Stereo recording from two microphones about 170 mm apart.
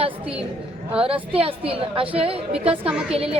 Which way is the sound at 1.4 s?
35° right (ahead or behind).